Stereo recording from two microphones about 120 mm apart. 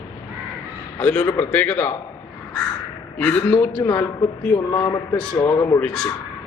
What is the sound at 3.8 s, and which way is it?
A man's voice, 25° left (ahead or behind).